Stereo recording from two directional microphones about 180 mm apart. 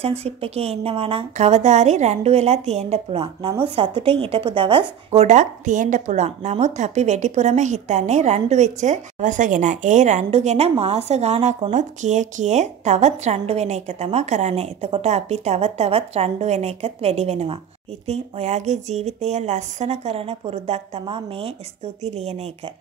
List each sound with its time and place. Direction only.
0.0 s a woman's voice: 35° right (ahead or behind)